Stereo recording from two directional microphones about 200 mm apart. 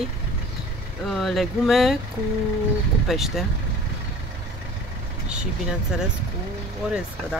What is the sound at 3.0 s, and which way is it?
Speech, centre (ahead or behind).